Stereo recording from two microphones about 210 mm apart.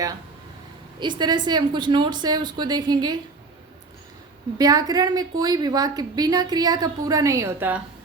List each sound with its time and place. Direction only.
0.9 s a woman's voice: 20° right (ahead or behind)
4.5 s a woman's voice: 15° right (ahead or behind)